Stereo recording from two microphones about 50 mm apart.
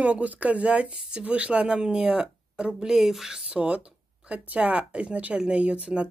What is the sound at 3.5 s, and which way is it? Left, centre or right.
Speech, right.